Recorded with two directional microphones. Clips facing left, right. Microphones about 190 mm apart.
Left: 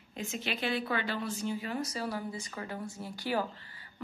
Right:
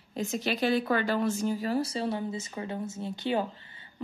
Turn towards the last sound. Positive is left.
turn(degrees=-20)  # may be behind; listen again after turning